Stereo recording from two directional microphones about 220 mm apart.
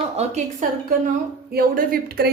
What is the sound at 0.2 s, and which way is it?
Speech, 30° right (ahead or behind).